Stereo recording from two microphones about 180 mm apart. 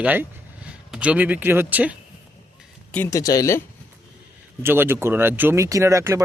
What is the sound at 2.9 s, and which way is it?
Speech, 15° left (ahead or behind).